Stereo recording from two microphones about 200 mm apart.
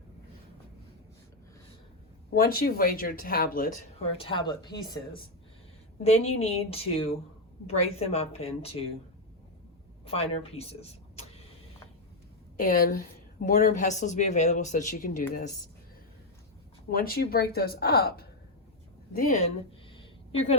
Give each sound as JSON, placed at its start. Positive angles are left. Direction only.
{"t": 2.3, "sound": "speech", "side_deg": 45}
{"t": 4.2, "sound": "speech", "side_deg": 25}
{"t": 6.0, "sound": "speech", "side_deg": 30}
{"t": 10.1, "sound": "speech", "side_deg": 30}
{"t": 12.5, "sound": "speech", "side_deg": 45}
{"t": 16.9, "sound": "speech", "side_deg": 45}
{"t": 19.1, "sound": "speech", "side_deg": 40}
{"t": 19.9, "sound": "a sound", "side_deg": 30}